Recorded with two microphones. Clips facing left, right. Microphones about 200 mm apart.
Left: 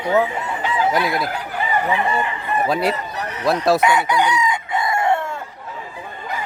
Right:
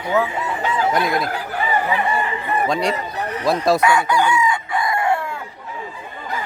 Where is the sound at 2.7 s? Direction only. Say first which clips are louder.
Left 1 dB; 5° left (ahead or behind).